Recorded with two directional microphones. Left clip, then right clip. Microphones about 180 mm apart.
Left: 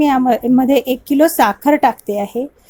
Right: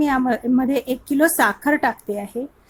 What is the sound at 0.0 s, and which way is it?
A woman's voice, 25° left (ahead or behind).